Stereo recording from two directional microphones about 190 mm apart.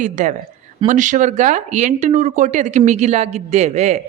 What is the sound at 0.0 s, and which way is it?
Speech, 40° right (ahead or behind).